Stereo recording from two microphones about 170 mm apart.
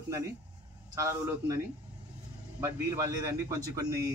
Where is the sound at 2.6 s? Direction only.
15° right (ahead or behind).